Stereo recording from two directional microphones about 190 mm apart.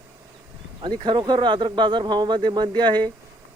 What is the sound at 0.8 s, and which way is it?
Speech, 25° right (ahead or behind).